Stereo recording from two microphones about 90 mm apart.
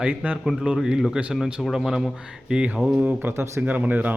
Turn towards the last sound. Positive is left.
turn(degrees=-20)  # may be behind; listen again after turning